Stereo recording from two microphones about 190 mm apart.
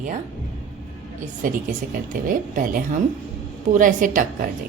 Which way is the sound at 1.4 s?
45° right (ahead or behind).